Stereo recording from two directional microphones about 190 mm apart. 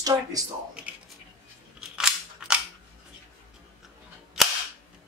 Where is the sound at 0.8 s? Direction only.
5° right (ahead or behind).